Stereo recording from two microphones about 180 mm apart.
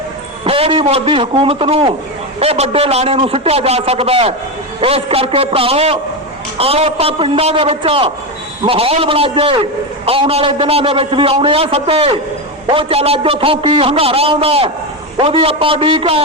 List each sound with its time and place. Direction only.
0.4 s a man's voice: 30° right (ahead or behind)